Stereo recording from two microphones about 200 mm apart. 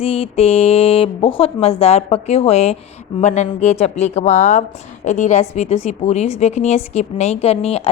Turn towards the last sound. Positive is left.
turn(degrees=30)  # may be behind; listen again after turning